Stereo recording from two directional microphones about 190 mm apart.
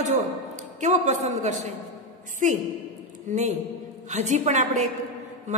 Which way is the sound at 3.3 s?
40° right (ahead or behind).